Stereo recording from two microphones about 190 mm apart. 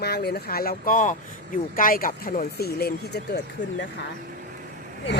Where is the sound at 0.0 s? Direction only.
55° left (ahead or behind).